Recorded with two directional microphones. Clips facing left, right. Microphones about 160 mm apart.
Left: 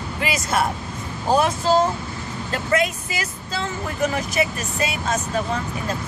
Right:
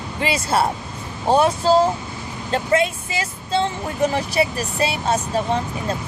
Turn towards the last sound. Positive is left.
turn(degrees=-30)  # may be behind; listen again after turning